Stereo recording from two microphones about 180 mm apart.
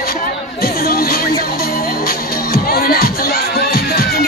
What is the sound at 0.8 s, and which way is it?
Music, 55° left (ahead or behind).